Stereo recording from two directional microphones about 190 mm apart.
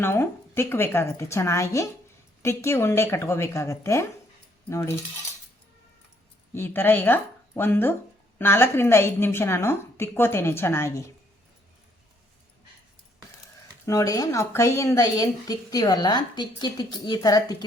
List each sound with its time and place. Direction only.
0.0 s a woman's voice: 10° left (ahead or behind)
6.5 s a woman's voice: 10° left (ahead or behind)
13.8 s a woman's voice: 15° left (ahead or behind)